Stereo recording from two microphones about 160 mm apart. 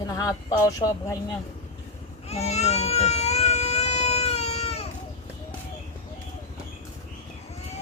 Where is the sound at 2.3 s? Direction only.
40° left (ahead or behind).